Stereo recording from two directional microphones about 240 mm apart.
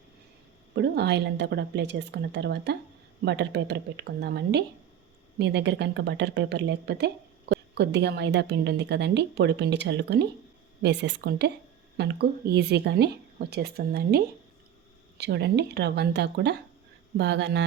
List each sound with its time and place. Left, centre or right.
0.8 s speech: right